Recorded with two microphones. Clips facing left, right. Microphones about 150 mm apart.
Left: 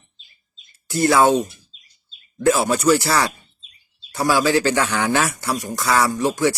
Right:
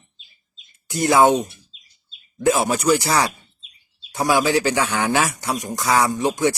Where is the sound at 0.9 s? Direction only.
20° right (ahead or behind).